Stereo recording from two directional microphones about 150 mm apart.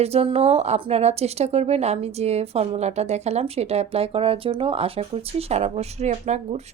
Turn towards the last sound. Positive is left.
turn(degrees=-50)  # may be behind; listen again after turning